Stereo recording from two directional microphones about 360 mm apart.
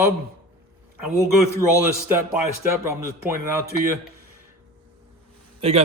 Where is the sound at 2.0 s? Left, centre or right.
Centre.